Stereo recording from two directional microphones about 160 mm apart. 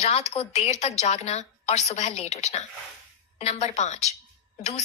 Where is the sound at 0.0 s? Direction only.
45° left (ahead or behind).